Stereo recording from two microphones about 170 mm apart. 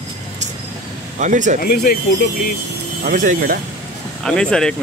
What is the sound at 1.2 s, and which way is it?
Speech, 45° right (ahead or behind).